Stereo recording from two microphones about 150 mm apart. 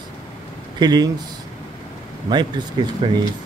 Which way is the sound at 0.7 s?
25° right (ahead or behind).